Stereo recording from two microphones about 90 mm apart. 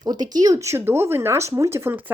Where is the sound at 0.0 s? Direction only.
50° right (ahead or behind).